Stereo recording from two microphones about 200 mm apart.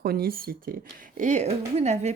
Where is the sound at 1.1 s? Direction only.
35° right (ahead or behind).